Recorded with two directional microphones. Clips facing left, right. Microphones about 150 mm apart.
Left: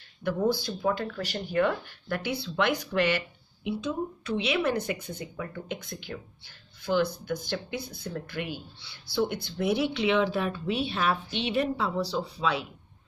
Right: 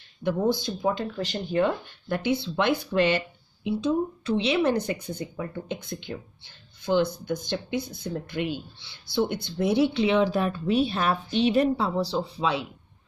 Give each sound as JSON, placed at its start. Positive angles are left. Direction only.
{"t": 0.2, "sound": "speech", "side_deg": -20}